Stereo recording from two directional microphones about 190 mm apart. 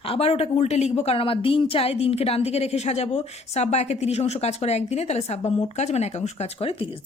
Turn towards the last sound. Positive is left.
turn(degrees=30)  # may be behind; listen again after turning